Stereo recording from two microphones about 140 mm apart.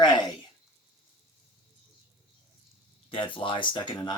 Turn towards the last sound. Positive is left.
turn(degrees=30)  # may be behind; listen again after turning